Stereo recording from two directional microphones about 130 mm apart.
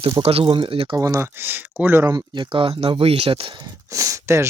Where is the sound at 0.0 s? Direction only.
50° right (ahead or behind).